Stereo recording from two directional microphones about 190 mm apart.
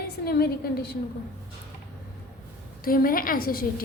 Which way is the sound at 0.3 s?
55° left (ahead or behind).